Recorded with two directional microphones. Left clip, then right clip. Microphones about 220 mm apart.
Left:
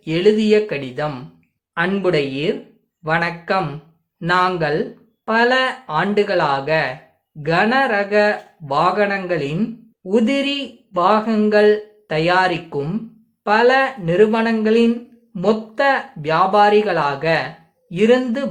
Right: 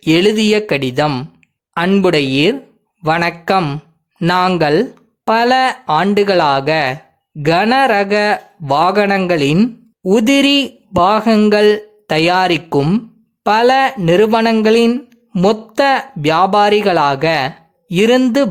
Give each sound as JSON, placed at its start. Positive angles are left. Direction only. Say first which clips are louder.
{"t": 0.0, "sound": "speech", "louder": "right 4 dB", "side_deg": -50}